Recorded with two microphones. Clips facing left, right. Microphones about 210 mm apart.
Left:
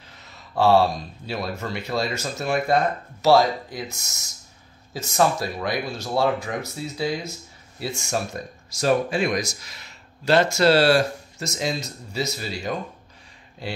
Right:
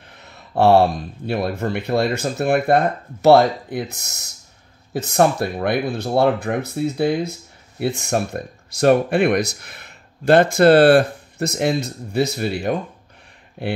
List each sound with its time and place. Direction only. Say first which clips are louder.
0.2 s speech: right 4 dB; 60° right (ahead or behind)